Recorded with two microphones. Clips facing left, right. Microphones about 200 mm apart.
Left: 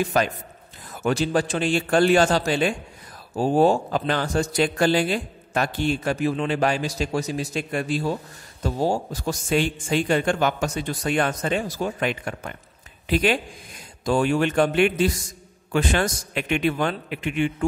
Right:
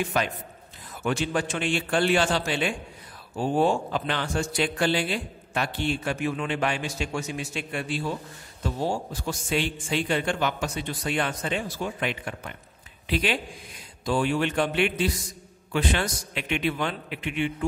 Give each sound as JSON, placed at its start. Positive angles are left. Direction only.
{"t": 0.0, "sound": "a man's voice", "side_deg": 40}